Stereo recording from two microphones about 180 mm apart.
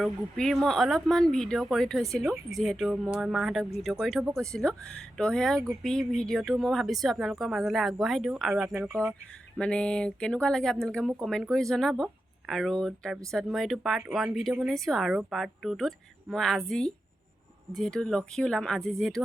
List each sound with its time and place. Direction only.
0.0 s speech: centre (ahead or behind)